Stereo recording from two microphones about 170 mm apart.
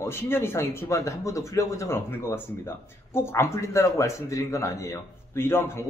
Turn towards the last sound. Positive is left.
turn(degrees=15)  # may be behind; listen again after turning